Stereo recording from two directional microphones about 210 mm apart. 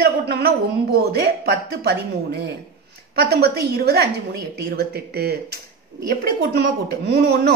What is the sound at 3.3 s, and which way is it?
Speech, 50° right (ahead or behind).